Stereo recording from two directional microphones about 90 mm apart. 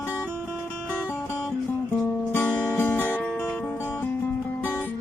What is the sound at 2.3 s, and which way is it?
Music, 20° left (ahead or behind).